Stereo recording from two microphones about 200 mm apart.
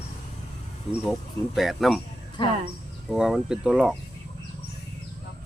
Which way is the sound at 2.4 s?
25° left (ahead or behind).